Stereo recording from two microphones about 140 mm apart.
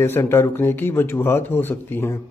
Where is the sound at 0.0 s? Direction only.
15° left (ahead or behind).